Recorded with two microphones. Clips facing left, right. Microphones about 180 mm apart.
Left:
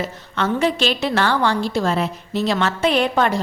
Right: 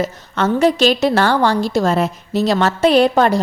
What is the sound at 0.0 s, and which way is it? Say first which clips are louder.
A woman's voice: right 5 dB; 45° right (ahead or behind).